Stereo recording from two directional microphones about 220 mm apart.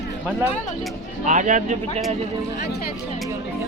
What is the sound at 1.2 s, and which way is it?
Speech, 35° right (ahead or behind).